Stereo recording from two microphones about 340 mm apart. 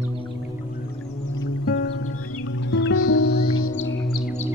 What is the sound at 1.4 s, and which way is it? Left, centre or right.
Music, left.